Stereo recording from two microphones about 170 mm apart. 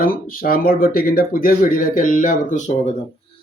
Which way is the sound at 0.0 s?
55° left (ahead or behind).